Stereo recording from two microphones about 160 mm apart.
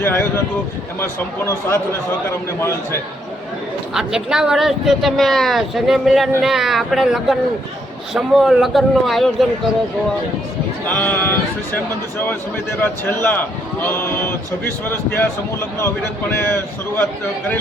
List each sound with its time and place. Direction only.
0.0 s a man's voice: 15° left (ahead or behind)
1.5 s a man's voice: 15° left (ahead or behind)
3.9 s speech: 5° right (ahead or behind)
10.8 s a man's voice: 10° left (ahead or behind)
12.8 s a man's voice: 10° left (ahead or behind)
16.3 s a man's voice: 10° left (ahead or behind)